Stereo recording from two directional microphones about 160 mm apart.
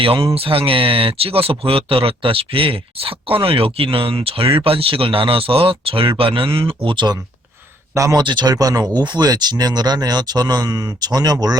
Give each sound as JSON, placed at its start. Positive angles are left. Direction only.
{"t": 0.0, "sound": "speech", "side_deg": -35}